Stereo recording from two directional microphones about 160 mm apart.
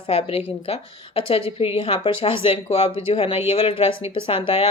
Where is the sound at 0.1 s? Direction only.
35° left (ahead or behind).